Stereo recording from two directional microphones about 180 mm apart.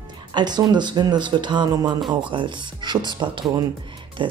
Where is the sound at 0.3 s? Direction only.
25° right (ahead or behind).